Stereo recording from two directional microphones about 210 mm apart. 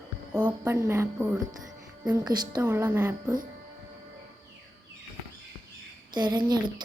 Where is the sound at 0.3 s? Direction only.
10° right (ahead or behind).